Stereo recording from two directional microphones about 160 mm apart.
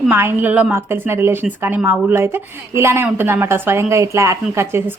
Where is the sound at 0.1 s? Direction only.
15° right (ahead or behind).